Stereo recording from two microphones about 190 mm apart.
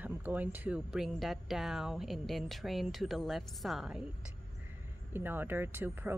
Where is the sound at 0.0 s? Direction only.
10° right (ahead or behind).